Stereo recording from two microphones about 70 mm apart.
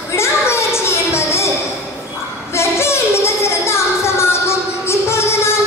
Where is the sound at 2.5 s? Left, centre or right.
Left.